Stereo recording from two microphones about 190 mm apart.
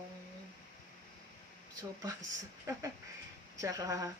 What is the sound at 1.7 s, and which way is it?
Speech, 20° right (ahead or behind).